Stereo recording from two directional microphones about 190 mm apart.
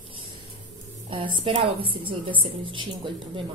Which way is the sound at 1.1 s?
25° right (ahead or behind).